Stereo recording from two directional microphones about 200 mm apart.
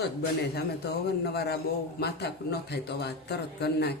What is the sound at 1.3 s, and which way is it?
A man's voice, 50° left (ahead or behind).